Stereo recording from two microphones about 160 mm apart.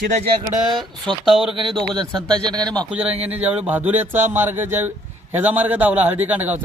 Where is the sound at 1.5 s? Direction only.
30° right (ahead or behind).